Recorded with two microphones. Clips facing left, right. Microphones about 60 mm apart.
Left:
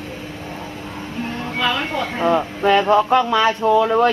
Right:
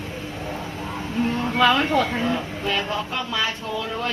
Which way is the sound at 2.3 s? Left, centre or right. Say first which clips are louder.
Left 9 dB; left.